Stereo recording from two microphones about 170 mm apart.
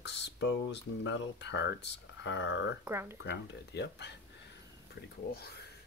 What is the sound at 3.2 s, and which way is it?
Speech, 85° left.